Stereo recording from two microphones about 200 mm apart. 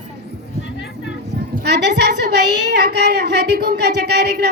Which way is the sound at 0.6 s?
60° left (ahead or behind).